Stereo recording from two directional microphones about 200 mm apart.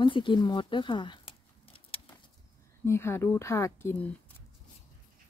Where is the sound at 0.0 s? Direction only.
25° left (ahead or behind).